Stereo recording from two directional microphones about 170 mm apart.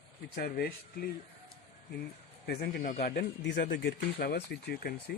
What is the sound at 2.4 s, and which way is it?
Speech, 65° left (ahead or behind).